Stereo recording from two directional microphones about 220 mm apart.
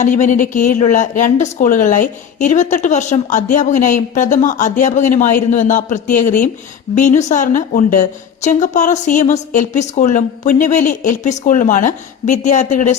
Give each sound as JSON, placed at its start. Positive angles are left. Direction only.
{"t": 0.0, "sound": "speech", "side_deg": 35}